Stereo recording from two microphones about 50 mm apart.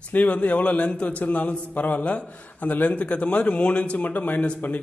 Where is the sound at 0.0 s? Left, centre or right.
Left.